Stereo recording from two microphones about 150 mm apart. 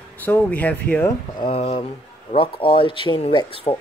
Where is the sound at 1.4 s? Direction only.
40° left (ahead or behind).